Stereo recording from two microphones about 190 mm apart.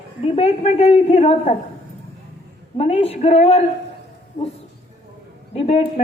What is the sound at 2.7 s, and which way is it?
Speech, 30° left (ahead or behind).